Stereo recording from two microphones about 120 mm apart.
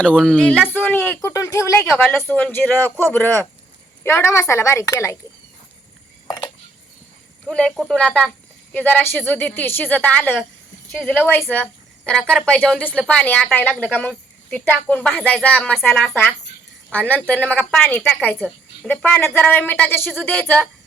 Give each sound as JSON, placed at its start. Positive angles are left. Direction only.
{"t": 0.0, "sound": "a woman's voice", "side_deg": 5}
{"t": 6.2, "sound": "cutlery", "side_deg": 30}
{"t": 7.4, "sound": "a woman's voice", "side_deg": 5}